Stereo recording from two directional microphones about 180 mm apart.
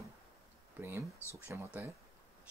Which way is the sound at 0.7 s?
15° right (ahead or behind).